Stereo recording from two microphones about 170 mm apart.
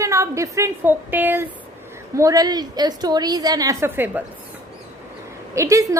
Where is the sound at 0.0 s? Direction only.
15° right (ahead or behind).